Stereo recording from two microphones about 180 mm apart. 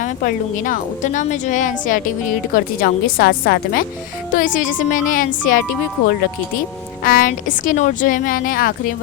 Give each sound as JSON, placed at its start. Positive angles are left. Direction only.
{"t": 0.0, "sound": "a woman's voice", "side_deg": 50}
{"t": 7.0, "sound": "a woman's voice", "side_deg": 50}